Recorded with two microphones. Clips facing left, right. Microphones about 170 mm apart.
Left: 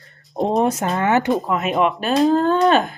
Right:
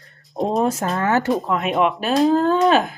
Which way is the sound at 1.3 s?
Centre (ahead or behind).